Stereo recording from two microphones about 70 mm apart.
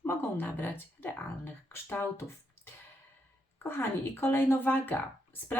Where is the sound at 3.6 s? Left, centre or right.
Left.